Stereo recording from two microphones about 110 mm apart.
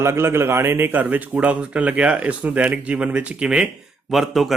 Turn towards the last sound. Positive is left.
turn(degrees=0)  # may be behind; listen again after turning